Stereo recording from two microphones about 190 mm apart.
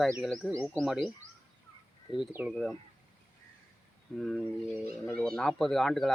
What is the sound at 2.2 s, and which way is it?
Speech, 5° right (ahead or behind).